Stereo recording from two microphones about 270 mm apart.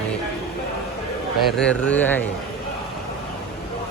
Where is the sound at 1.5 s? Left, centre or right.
Centre.